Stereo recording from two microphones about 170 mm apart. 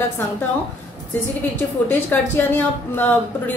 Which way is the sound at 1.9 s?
10° left (ahead or behind).